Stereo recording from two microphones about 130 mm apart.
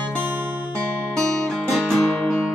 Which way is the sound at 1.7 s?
5° left (ahead or behind).